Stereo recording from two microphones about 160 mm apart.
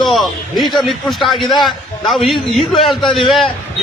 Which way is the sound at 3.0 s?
30° left (ahead or behind).